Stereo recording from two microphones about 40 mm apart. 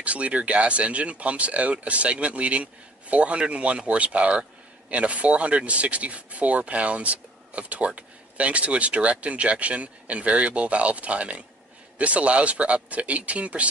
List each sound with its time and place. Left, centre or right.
0.0 s speech: right